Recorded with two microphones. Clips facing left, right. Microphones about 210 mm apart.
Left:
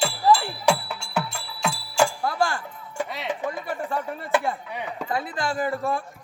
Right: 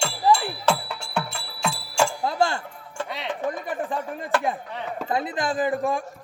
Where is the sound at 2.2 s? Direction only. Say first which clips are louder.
Right 2 dB; 20° right (ahead or behind).